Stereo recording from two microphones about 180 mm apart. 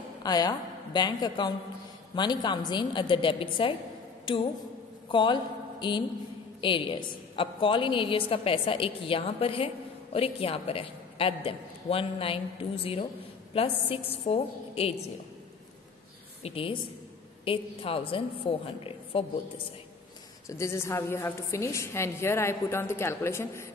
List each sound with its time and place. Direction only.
0.2 s a woman's voice: 20° left (ahead or behind)
5.1 s a woman's voice: 25° left (ahead or behind)
16.4 s a woman's voice: 30° left (ahead or behind)
20.4 s a woman's voice: 15° left (ahead or behind)